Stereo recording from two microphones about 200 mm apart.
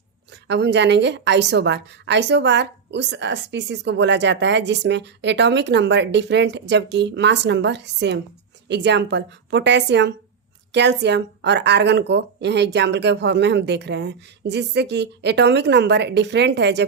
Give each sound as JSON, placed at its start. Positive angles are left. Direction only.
{"t": 0.4, "sound": "a woman's voice", "side_deg": -60}